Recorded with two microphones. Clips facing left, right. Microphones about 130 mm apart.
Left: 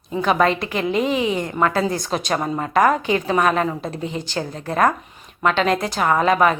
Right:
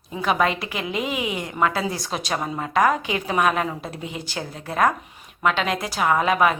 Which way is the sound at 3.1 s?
10° right (ahead or behind).